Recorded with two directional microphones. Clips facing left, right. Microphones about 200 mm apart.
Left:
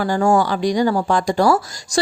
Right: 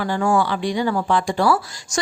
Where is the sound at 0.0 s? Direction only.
40° left (ahead or behind).